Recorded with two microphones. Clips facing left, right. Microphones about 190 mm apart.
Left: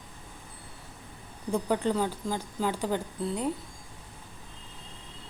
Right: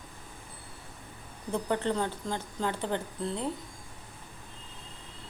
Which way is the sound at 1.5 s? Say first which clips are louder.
Left 2 dB; 10° left (ahead or behind).